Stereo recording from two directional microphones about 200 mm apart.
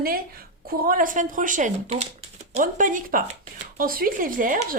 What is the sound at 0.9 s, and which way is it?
A woman's voice, 45° right (ahead or behind).